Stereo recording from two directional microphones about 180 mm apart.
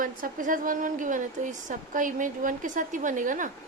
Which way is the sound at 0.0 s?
50° right (ahead or behind).